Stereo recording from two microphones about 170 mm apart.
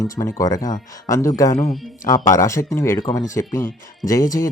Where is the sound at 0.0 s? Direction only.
20° left (ahead or behind).